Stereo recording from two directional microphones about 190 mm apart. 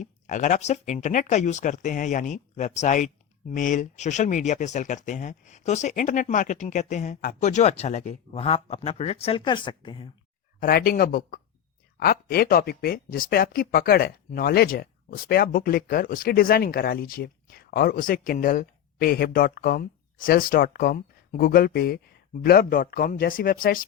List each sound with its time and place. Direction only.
0.0 s speech: 40° left (ahead or behind); by 10.1 s 25° left (ahead or behind)
10.6 s speech: 50° left (ahead or behind)